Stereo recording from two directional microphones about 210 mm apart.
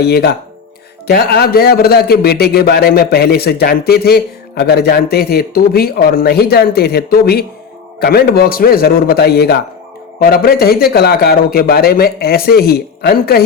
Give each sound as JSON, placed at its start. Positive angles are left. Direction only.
{"t": 0.0, "sound": "a man's voice", "side_deg": 50}